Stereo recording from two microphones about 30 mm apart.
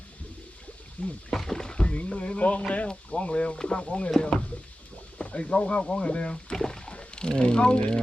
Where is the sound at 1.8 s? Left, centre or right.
Left.